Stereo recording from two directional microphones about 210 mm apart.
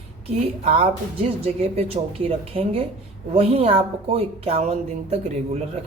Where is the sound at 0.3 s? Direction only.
30° right (ahead or behind).